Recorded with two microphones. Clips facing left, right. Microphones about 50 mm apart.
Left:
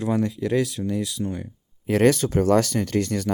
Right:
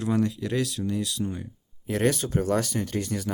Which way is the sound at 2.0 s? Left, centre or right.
Left.